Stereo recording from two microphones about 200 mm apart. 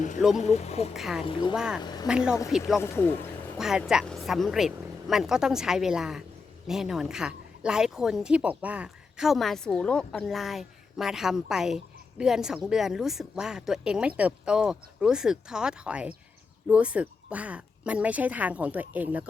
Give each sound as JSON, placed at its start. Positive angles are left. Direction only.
{"t": 0.2, "sound": "a woman's voice", "side_deg": 0}
{"t": 0.4, "sound": "speech", "side_deg": 35}
{"t": 0.9, "sound": "a woman's voice", "side_deg": 0}
{"t": 1.2, "sound": "speech", "side_deg": 25}
{"t": 1.5, "sound": "a woman's voice", "side_deg": -5}
{"t": 1.8, "sound": "speech", "side_deg": 20}
{"t": 2.0, "sound": "a woman's voice", "side_deg": -5}
{"t": 2.8, "sound": "speech", "side_deg": 10}
{"t": 3.6, "sound": "a woman's voice", "side_deg": 0}